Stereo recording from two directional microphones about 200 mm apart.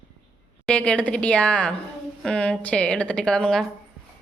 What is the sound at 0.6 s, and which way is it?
A woman's voice, 5° left (ahead or behind).